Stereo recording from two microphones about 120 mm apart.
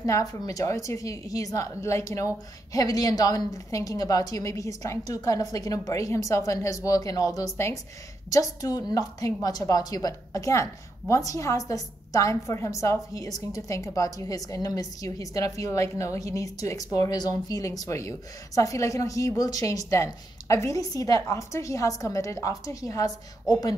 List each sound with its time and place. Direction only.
0.0 s a woman's voice: 30° left (ahead or behind)